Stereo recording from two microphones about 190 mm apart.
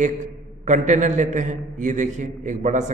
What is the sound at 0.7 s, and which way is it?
A man's voice, 40° right (ahead or behind).